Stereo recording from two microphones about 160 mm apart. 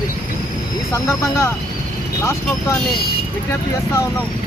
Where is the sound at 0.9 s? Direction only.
20° left (ahead or behind).